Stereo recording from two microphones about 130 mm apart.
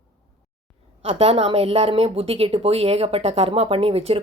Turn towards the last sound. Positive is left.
turn(degrees=-50)  # may be behind; listen again after turning